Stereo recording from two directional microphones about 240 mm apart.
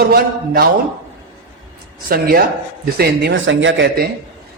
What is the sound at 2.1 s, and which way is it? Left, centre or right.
A man's voice, right.